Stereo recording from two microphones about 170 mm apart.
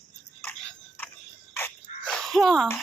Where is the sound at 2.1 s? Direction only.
Centre (ahead or behind).